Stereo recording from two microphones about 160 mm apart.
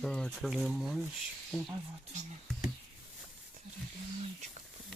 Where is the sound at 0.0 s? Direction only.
5° left (ahead or behind).